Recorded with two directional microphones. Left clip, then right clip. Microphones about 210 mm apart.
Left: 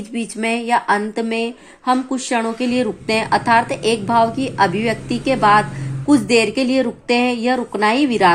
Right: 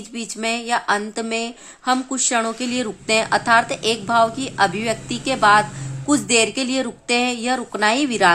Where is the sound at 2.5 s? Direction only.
50° right (ahead or behind).